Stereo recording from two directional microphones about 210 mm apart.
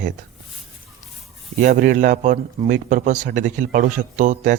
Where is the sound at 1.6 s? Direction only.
40° right (ahead or behind).